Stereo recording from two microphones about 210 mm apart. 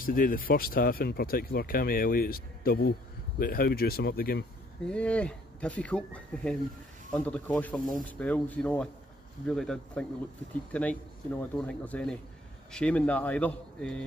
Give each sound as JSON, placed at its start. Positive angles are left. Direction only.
{"t": 0.0, "sound": "speech", "side_deg": 40}
{"t": 4.8, "sound": "speech", "side_deg": 5}